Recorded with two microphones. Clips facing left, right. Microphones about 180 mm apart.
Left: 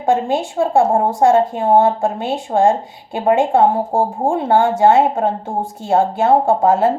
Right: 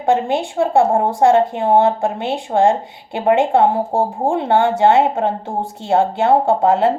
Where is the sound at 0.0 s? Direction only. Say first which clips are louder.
Even; 60° right (ahead or behind).